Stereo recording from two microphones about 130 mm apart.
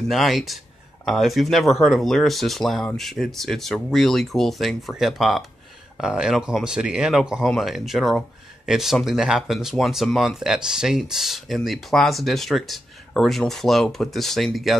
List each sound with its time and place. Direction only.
0.1 s speech: centre (ahead or behind)